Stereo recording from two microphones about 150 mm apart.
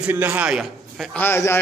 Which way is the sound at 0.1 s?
10° right (ahead or behind).